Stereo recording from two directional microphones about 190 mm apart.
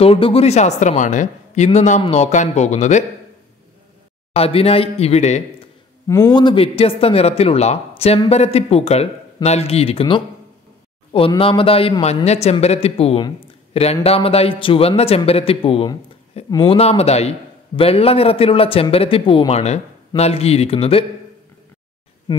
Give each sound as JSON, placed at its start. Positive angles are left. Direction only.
{"t": 0.0, "sound": "speech", "side_deg": 30}
{"t": 4.3, "sound": "speech", "side_deg": 30}
{"t": 6.0, "sound": "a man's voice", "side_deg": 20}